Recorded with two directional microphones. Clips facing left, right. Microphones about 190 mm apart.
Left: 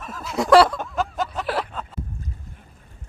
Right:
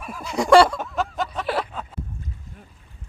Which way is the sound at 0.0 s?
10° right (ahead or behind).